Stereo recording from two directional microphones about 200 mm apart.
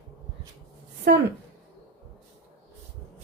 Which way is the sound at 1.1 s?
60° right (ahead or behind).